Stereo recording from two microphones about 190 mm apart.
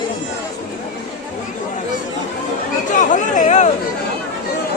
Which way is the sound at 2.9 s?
40° left (ahead or behind).